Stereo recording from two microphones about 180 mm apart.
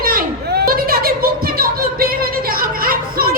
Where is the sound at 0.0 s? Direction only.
55° right (ahead or behind).